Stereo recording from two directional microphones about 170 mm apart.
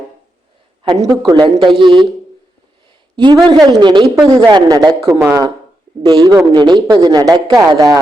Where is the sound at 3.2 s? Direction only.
25° right (ahead or behind).